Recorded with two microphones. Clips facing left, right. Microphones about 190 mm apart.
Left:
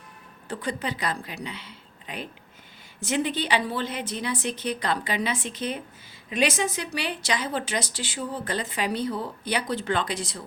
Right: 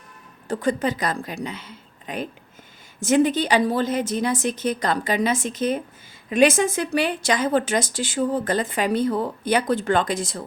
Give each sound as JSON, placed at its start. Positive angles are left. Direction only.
{"t": 0.4, "sound": "a woman's voice", "side_deg": -45}